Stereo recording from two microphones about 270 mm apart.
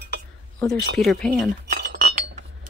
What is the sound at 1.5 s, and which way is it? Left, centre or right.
Chink, right.